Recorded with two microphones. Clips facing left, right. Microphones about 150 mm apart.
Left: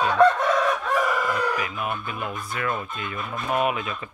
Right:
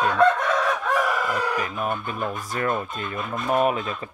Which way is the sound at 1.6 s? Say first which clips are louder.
Right 2 dB; 40° right (ahead or behind).